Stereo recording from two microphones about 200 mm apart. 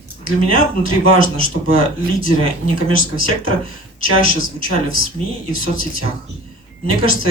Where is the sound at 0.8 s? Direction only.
90° right.